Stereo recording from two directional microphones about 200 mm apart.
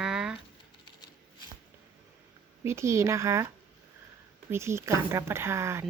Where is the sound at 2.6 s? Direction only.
15° right (ahead or behind).